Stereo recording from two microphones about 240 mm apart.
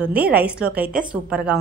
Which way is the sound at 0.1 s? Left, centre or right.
Centre.